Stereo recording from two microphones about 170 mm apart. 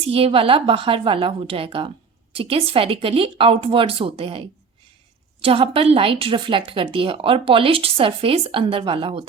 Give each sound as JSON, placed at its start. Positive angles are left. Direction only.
{"t": 0.1, "sound": "a woman's voice", "side_deg": -35}